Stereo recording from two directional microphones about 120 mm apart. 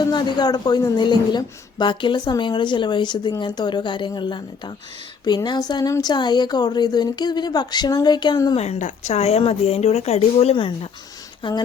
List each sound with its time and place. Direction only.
0.0 s a woman's voice: 35° left (ahead or behind)
8.5 s speech: 65° left (ahead or behind)
11.4 s a woman's voice: 40° left (ahead or behind)